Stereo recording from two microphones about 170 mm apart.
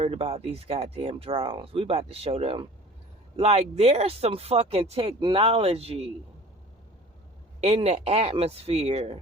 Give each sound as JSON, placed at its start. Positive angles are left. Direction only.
{"t": 0.0, "sound": "speech", "side_deg": -35}
{"t": 7.6, "sound": "speech", "side_deg": -35}